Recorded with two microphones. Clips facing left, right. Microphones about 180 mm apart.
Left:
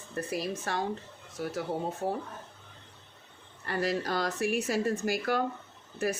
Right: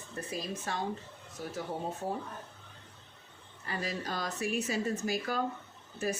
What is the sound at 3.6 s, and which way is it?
Speech, 65° left (ahead or behind).